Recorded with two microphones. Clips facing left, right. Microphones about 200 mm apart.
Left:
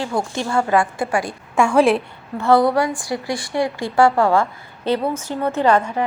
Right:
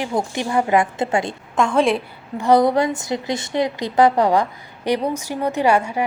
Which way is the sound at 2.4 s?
20° right (ahead or behind).